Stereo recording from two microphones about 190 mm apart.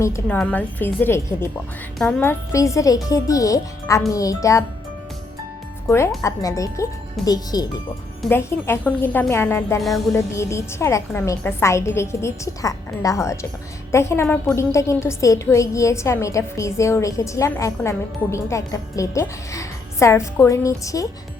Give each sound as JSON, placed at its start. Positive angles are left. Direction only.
{"t": 0.0, "sound": "a woman's voice", "side_deg": 10}
{"t": 6.2, "sound": "a woman's voice", "side_deg": 15}
{"t": 9.8, "sound": "music", "side_deg": 0}
{"t": 10.2, "sound": "a woman's voice", "side_deg": 15}